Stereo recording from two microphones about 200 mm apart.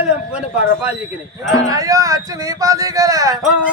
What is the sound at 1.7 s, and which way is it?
A man's voice, 15° right (ahead or behind).